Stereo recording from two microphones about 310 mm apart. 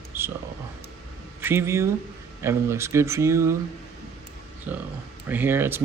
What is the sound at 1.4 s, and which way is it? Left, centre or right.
Speech, centre.